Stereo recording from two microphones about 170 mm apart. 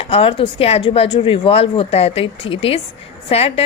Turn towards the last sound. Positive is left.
turn(degrees=35)  # may be behind; listen again after turning